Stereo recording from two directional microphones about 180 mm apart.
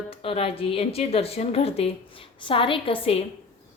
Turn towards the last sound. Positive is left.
turn(degrees=30)  # may be behind; listen again after turning